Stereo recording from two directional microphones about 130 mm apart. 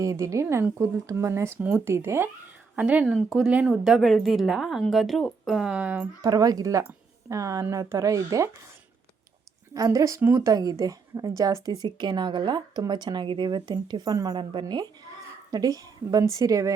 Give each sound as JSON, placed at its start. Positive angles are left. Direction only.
{"t": 0.0, "sound": "speech", "side_deg": -25}
{"t": 3.1, "sound": "a woman's voice", "side_deg": 0}
{"t": 6.2, "sound": "speech", "side_deg": -30}
{"t": 9.7, "sound": "speech", "side_deg": -25}